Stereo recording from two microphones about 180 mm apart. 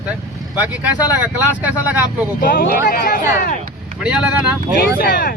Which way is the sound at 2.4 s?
50° left (ahead or behind).